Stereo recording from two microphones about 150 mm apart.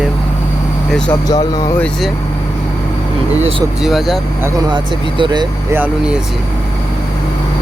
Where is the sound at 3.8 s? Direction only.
Centre (ahead or behind).